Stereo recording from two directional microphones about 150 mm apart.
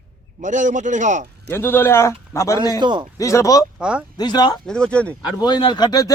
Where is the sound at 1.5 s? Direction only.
15° left (ahead or behind).